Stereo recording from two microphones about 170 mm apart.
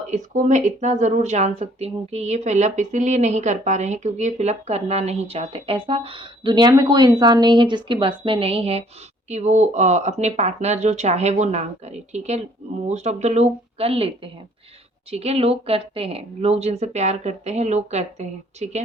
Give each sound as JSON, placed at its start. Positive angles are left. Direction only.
{"t": 0.1, "sound": "speech", "side_deg": -45}